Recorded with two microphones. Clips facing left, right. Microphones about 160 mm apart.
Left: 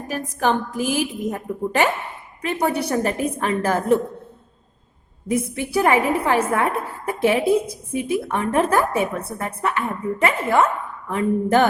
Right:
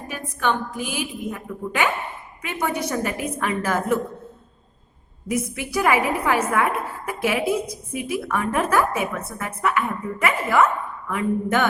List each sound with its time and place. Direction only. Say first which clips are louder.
0.1 s a woman's voice: left 3 dB; 40° left (ahead or behind)
5.3 s a woman's voice: left 3 dB; 30° left (ahead or behind)